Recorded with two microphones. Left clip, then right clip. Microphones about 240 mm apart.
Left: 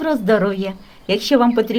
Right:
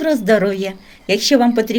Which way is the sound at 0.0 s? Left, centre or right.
Centre.